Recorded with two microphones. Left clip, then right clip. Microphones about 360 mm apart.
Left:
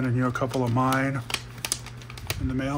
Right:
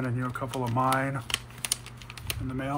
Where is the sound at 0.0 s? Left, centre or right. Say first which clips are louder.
Left 6 dB; centre.